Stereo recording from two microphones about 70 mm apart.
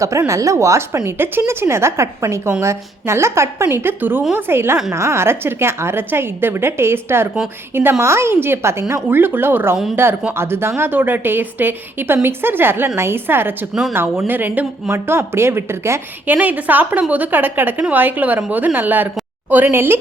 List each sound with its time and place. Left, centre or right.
0.3 s a woman's voice: right
14.8 s a woman's voice: right
16.2 s a woman's voice: right